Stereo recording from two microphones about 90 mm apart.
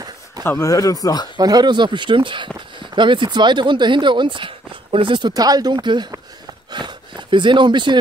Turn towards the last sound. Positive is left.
turn(degrees=-60)  # may be behind; listen again after turning